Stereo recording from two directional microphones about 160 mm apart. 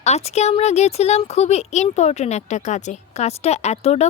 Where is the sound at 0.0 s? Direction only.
45° left (ahead or behind).